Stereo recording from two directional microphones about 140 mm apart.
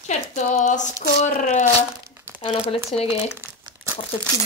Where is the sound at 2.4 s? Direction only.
45° left (ahead or behind).